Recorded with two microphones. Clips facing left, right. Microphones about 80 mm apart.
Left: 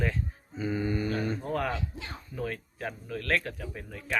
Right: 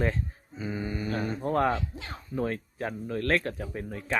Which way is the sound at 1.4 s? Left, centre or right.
Right.